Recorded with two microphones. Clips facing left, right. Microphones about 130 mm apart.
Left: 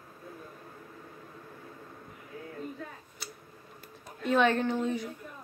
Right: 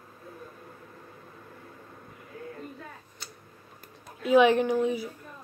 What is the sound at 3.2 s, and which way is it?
Tick-tock, 5° left (ahead or behind).